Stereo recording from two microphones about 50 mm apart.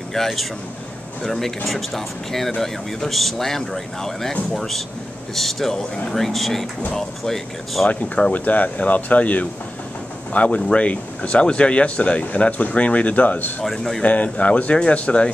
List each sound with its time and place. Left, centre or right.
0.1 s speech: centre
8.3 s speech: left
13.7 s speech: centre
14.0 s speech: left